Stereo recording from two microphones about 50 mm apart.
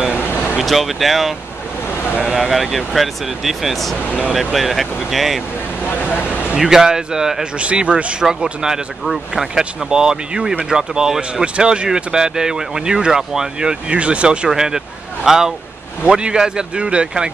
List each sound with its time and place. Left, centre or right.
0.2 s a sound: left
0.6 s speech: centre
6.0 s speech: left
6.5 s speech: centre
7.5 s speech: right
14.5 s speech: centre
16.0 s speech: right